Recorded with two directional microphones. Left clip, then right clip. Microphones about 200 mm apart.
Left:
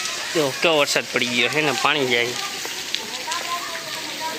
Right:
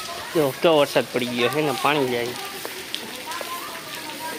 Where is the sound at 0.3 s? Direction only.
15° right (ahead or behind).